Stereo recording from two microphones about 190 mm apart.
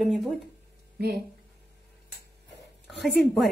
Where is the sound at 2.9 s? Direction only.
Centre (ahead or behind).